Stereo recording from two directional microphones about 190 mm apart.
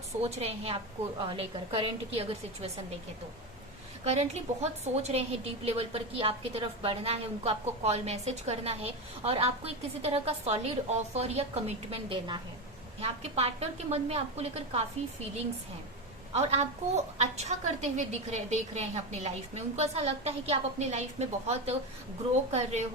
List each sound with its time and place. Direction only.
0.2 s a woman's voice: 35° right (ahead or behind)
4.0 s a woman's voice: 35° right (ahead or behind)
16.3 s a woman's voice: 35° right (ahead or behind)